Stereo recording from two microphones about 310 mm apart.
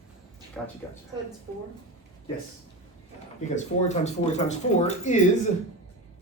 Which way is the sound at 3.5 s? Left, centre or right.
Left.